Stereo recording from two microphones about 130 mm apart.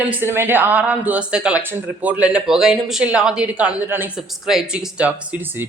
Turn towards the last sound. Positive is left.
turn(degrees=0)  # may be behind; listen again after turning